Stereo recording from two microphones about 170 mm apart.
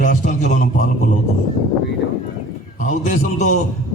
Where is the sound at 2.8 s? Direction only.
50° left (ahead or behind).